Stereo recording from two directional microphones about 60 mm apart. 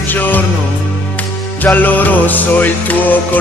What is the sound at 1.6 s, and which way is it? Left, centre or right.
Music, left.